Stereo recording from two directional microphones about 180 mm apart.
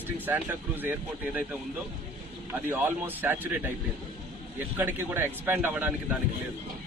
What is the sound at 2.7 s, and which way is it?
Speech, 10° right (ahead or behind).